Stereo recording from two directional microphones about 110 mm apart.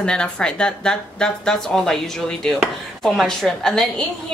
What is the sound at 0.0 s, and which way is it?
A woman's voice, 10° left (ahead or behind).